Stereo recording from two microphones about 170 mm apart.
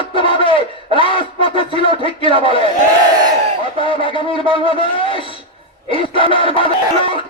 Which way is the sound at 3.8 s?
30° left (ahead or behind).